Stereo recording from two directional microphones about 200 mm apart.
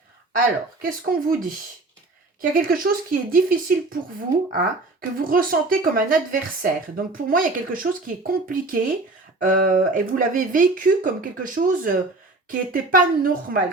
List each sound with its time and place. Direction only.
0.8 s speech: 45° right (ahead or behind)
2.6 s speech: 45° right (ahead or behind)